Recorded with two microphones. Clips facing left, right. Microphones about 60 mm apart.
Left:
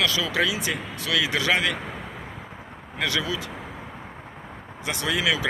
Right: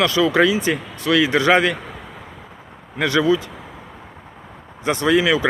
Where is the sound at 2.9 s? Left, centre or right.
Right.